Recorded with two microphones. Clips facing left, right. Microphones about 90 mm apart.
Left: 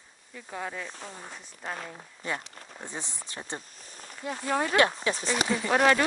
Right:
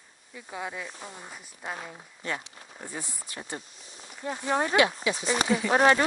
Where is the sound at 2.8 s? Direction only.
25° left (ahead or behind).